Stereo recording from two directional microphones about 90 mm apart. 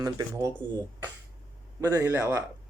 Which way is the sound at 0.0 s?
40° right (ahead or behind).